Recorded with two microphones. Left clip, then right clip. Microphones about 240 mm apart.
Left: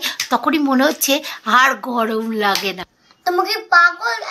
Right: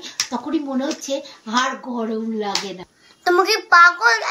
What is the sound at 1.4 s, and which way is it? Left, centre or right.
Speech, left.